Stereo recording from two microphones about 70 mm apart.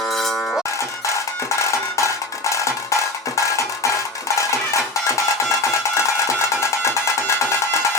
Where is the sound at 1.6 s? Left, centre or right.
Left.